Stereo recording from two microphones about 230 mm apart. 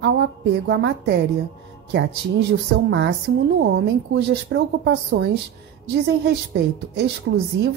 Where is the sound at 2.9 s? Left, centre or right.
Right.